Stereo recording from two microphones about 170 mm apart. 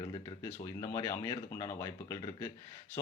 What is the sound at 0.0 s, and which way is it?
Speech, 30° left (ahead or behind).